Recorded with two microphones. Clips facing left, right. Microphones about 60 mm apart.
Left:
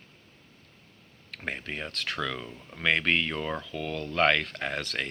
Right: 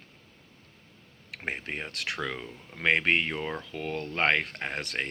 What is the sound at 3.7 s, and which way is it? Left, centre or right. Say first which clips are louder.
Speech: even; right.